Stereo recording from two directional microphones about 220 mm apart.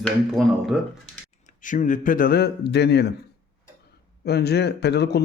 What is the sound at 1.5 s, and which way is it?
Speech, 35° left (ahead or behind).